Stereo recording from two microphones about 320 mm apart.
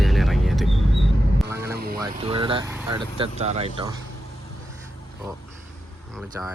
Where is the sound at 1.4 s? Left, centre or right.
Centre.